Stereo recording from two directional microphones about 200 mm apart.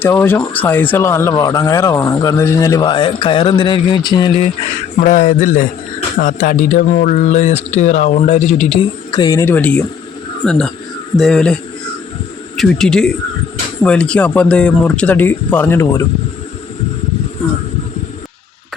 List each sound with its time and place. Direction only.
0.0 s speech: 10° left (ahead or behind)
4.9 s speech: 40° left (ahead or behind); by 11.5 s centre (ahead or behind)
12.5 s speech: centre (ahead or behind)